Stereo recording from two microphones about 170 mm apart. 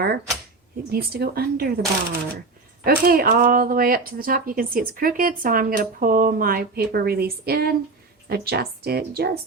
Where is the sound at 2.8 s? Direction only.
60° right (ahead or behind).